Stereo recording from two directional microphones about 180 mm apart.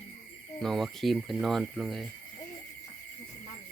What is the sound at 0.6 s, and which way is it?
Cricket, centre (ahead or behind).